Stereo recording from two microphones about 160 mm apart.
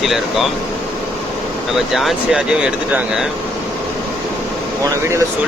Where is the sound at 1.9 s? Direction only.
Centre (ahead or behind).